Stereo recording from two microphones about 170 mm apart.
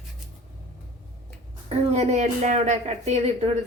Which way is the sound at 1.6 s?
40° right (ahead or behind).